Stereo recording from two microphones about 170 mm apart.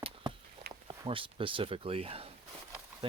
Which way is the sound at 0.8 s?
30° right (ahead or behind).